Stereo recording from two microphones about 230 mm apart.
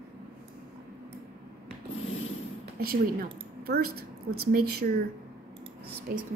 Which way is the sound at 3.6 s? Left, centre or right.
Right.